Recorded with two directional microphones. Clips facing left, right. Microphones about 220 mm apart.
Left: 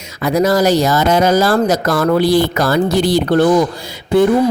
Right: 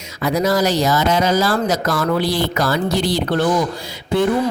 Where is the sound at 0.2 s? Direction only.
50° left (ahead or behind).